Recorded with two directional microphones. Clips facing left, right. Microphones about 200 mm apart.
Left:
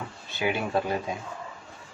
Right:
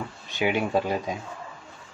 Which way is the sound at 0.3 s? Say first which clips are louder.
Right 3 dB; 15° right (ahead or behind).